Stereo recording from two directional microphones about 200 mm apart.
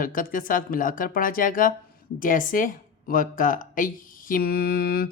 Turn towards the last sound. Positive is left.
turn(degrees=50)  # may be behind; listen again after turning